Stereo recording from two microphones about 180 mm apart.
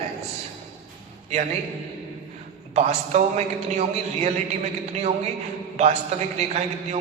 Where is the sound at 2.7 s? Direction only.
40° right (ahead or behind).